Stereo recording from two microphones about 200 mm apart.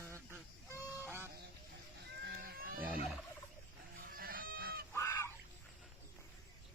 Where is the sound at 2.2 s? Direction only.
50° right (ahead or behind).